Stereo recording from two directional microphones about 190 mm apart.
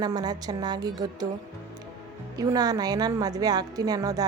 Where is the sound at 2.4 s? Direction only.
20° right (ahead or behind).